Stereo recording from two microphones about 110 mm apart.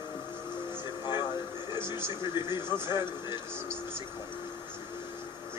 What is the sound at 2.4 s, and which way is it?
A man's voice, 45° left (ahead or behind).